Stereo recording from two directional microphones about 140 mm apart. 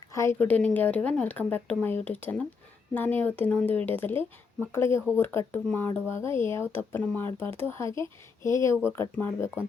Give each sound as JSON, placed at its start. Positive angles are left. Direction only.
{"t": 0.1, "sound": "a woman's voice", "side_deg": 20}